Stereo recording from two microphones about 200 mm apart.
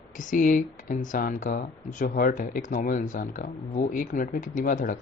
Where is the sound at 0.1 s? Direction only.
40° left (ahead or behind).